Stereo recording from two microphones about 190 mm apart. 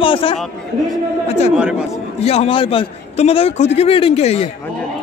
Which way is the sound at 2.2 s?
30° left (ahead or behind).